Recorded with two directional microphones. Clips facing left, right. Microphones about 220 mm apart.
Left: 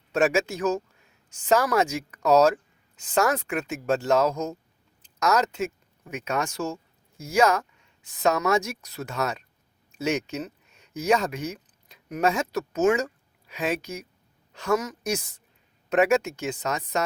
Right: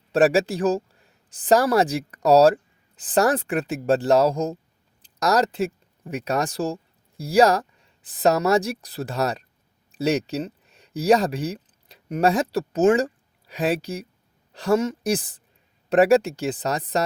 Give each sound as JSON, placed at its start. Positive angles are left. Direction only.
{"t": 0.1, "sound": "speech", "side_deg": -35}